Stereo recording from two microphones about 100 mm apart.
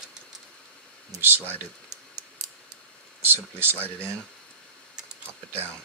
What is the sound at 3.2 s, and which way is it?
Speech, 20° right (ahead or behind).